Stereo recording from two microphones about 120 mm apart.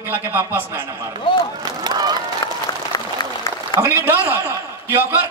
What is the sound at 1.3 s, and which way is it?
Speech, 45° left (ahead or behind).